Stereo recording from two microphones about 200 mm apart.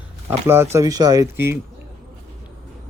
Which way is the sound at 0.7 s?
20° right (ahead or behind).